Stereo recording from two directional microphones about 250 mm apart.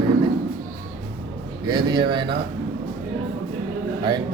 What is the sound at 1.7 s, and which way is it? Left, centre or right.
Speech, centre.